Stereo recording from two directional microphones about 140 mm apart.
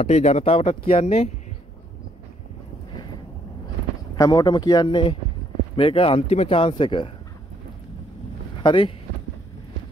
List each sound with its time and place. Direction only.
0.0 s speech: 50° left (ahead or behind)
4.2 s speech: 30° left (ahead or behind)
8.6 s speech: 35° left (ahead or behind)